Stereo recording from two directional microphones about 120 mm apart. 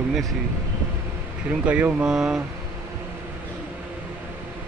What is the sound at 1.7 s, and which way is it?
Speech, 10° right (ahead or behind).